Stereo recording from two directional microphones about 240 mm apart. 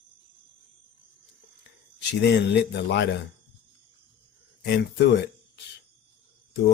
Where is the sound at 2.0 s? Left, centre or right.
Left.